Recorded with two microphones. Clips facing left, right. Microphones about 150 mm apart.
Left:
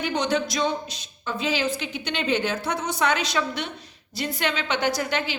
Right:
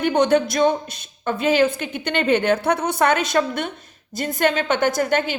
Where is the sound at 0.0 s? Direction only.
55° right (ahead or behind).